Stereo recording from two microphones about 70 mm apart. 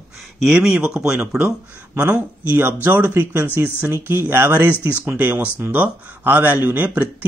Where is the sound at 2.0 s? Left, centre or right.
Right.